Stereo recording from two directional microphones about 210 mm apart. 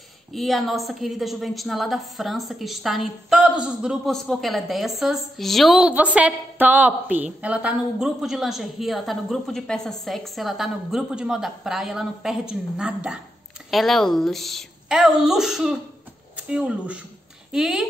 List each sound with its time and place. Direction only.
0.3 s a woman's voice: centre (ahead or behind)